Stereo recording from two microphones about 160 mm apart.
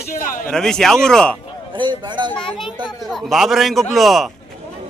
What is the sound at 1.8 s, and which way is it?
Speech, 30° right (ahead or behind).